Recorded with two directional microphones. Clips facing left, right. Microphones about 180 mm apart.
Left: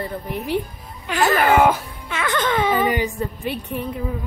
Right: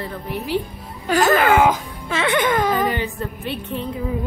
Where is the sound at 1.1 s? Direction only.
40° right (ahead or behind).